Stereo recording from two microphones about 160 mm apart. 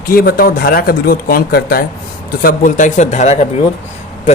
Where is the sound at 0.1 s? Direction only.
70° left (ahead or behind).